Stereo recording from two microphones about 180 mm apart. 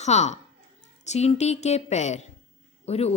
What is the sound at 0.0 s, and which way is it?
A woman's voice, 40° left (ahead or behind).